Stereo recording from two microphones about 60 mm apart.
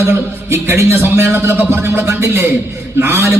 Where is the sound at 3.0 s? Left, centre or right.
Right.